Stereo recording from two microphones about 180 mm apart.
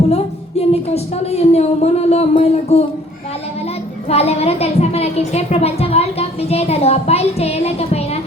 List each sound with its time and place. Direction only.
0.6 s a woman's voice: 35° left (ahead or behind)
4.1 s a woman's voice: 35° left (ahead or behind)